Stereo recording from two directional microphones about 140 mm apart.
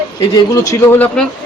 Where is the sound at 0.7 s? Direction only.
15° left (ahead or behind).